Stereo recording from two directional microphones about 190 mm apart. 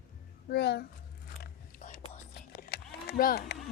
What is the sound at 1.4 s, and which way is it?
Biting, 50° left (ahead or behind).